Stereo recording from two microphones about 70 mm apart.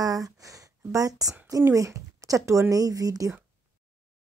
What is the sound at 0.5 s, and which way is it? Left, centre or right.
Speech, right.